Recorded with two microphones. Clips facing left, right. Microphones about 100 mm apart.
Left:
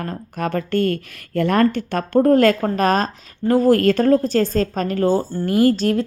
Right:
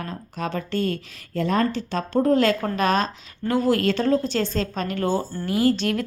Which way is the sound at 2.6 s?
40° left (ahead or behind).